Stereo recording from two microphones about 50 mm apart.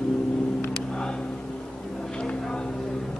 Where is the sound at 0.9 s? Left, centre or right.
Centre.